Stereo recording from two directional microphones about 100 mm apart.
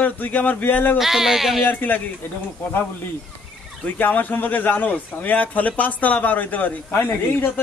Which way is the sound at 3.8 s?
15° left (ahead or behind).